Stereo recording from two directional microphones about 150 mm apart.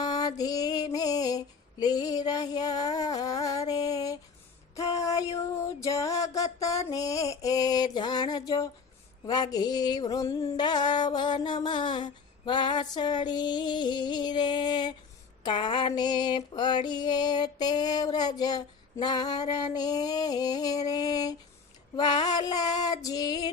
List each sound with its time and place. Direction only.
0.0 s music: 25° left (ahead or behind)
18.3 s female singing: 25° left (ahead or behind)